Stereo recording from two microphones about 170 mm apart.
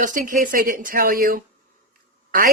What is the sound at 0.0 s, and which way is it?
Speech, 50° right (ahead or behind).